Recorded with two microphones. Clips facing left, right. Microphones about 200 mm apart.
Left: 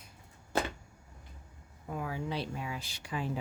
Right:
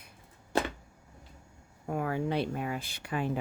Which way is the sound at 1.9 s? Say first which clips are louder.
Right 6 dB; 60° right (ahead or behind).